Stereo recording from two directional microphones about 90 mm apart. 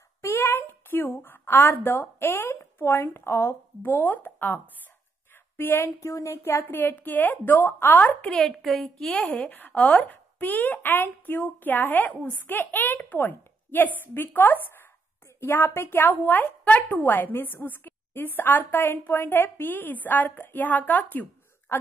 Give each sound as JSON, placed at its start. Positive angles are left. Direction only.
{"t": 0.2, "sound": "a woman's voice", "side_deg": 25}
{"t": 8.2, "sound": "a woman's voice", "side_deg": 10}
{"t": 9.1, "sound": "a woman's voice", "side_deg": 15}